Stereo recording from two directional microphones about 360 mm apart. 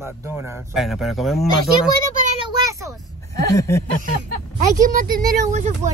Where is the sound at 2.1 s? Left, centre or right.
Centre.